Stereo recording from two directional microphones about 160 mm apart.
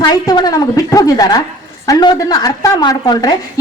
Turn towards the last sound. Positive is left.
turn(degrees=25)  # may be behind; listen again after turning